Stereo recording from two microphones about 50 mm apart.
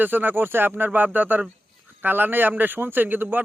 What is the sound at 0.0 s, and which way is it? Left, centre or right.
Speech, right.